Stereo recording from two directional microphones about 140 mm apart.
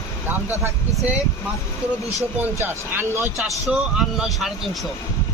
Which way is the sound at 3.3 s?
Centre (ahead or behind).